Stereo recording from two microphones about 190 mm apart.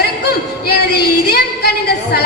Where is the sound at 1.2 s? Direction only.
55° left (ahead or behind).